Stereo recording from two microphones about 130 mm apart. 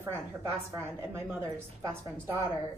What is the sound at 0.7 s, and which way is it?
A woman's voice, 20° right (ahead or behind).